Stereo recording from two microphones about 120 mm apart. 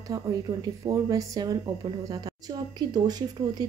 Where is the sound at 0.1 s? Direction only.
30° right (ahead or behind).